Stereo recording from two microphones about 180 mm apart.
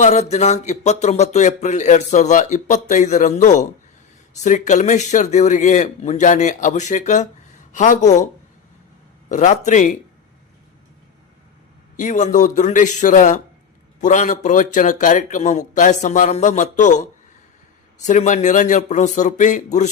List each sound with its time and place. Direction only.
0.0 s speech: 40° left (ahead or behind)
9.3 s speech: 40° left (ahead or behind)
11.9 s speech: 45° left (ahead or behind)